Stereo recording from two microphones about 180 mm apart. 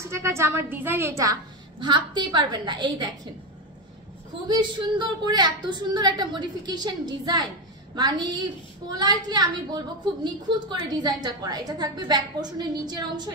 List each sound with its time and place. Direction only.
0.0 s a woman's voice: 15° right (ahead or behind)
4.5 s a woman's voice: 25° right (ahead or behind)